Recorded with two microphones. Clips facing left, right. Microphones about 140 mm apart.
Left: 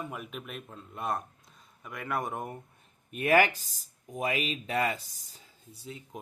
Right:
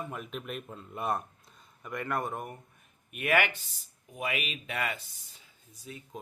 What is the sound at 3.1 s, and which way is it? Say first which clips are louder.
Speech: left 4 dB; 35° left (ahead or behind).